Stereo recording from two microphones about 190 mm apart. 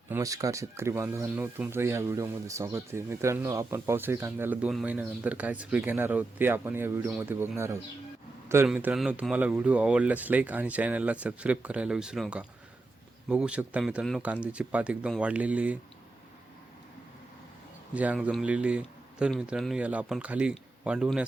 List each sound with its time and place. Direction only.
0.1 s speech: 15° right (ahead or behind)
17.9 s speech: 5° right (ahead or behind)